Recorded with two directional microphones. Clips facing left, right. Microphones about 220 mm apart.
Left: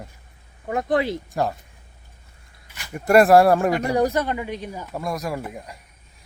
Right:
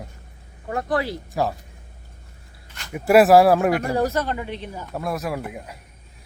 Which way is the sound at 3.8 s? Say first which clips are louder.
Left 2 dB; 15° left (ahead or behind).